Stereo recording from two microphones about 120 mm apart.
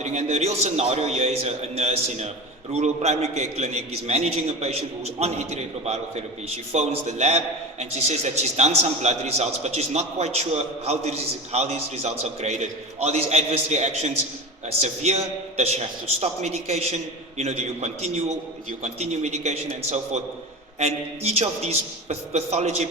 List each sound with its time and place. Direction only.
0.0 s a man's voice: 70° right (ahead or behind)